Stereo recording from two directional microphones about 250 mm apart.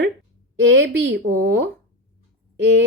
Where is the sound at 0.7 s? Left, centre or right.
Right.